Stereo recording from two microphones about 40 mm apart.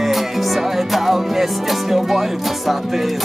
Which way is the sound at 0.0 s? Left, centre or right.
Centre.